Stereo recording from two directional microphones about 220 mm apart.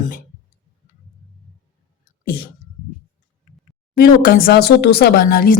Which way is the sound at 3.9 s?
40° left (ahead or behind).